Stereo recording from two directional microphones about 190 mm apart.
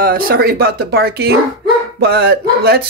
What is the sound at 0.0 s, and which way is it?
Speech, 50° right (ahead or behind).